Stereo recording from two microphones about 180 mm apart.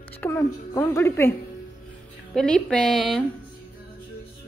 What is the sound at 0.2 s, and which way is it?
A woman's voice, 15° left (ahead or behind).